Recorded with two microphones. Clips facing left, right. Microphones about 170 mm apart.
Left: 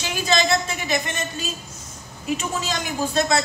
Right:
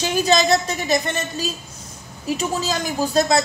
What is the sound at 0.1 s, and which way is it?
A woman's voice, 40° right (ahead or behind).